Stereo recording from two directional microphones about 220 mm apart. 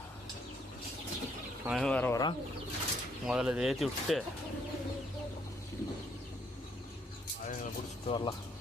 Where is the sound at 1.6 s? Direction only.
Centre (ahead or behind).